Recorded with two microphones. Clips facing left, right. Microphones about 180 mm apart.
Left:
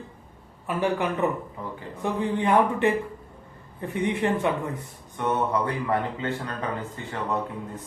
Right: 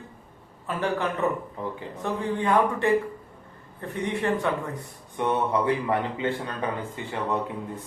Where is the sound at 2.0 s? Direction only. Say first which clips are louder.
Left 2 dB; 15° left (ahead or behind).